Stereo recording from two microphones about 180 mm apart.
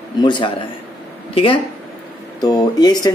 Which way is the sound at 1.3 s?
30° left (ahead or behind).